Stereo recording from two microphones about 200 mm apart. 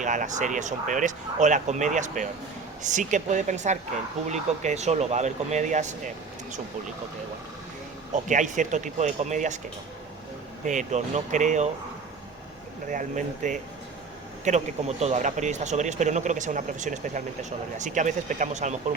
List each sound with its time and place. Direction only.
0.0 s speech: 40° right (ahead or behind)
8.1 s speech: 40° right (ahead or behind)
10.7 s speech: 35° right (ahead or behind)
12.9 s speech: 40° right (ahead or behind)